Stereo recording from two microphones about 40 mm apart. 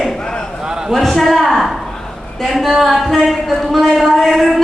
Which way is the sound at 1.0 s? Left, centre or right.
Centre.